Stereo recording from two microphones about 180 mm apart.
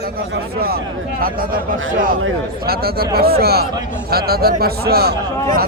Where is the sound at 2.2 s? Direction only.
60° right (ahead or behind).